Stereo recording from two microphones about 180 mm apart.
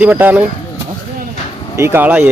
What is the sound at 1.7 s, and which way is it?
Speech, 15° right (ahead or behind).